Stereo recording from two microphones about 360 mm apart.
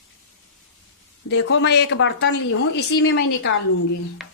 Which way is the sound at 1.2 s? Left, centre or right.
Left.